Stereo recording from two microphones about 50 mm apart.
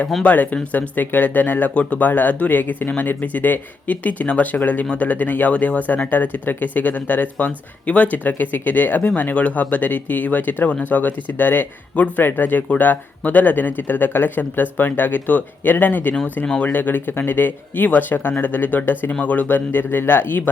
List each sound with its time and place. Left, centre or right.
0.2 s speech: left
1.7 s speech: left
11.9 s speech: left
12.2 s speech: left